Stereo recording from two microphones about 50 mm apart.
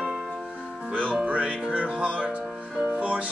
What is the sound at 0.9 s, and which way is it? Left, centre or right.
Speech, right.